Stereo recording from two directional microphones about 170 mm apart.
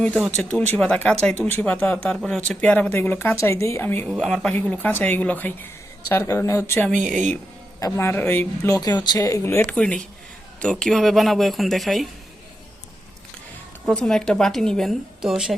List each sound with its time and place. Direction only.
0.3 s speech: 10° left (ahead or behind)
4.1 s a woman's voice: centre (ahead or behind)
4.5 s a woman's voice: 10° left (ahead or behind)
13.8 s a woman's voice: 5° left (ahead or behind)